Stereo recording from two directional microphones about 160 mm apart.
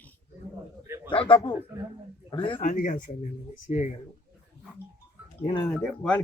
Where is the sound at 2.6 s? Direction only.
55° left (ahead or behind).